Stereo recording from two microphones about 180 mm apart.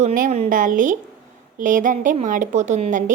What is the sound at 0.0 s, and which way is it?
A woman's voice, 45° right (ahead or behind).